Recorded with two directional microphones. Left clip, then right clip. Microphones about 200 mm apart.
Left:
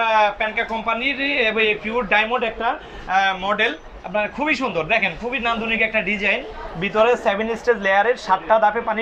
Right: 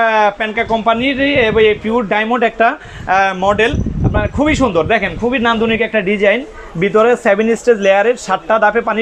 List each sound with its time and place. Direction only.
0.0 s a man's voice: 45° right (ahead or behind)